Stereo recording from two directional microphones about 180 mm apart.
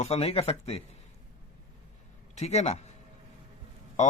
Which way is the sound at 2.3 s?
40° left (ahead or behind).